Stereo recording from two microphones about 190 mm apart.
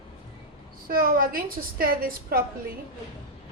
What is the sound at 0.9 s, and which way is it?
A woman's voice, 50° right (ahead or behind).